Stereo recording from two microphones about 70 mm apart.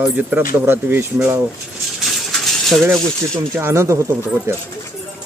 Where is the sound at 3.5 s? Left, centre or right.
Right.